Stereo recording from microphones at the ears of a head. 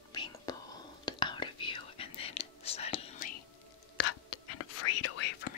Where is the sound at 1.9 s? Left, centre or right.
Left.